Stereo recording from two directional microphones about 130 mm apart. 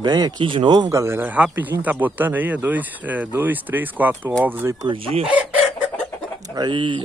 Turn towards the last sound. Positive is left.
turn(degrees=-40)  # may be behind; listen again after turning